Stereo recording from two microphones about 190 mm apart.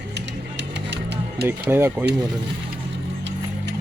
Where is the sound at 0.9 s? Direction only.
60° right (ahead or behind).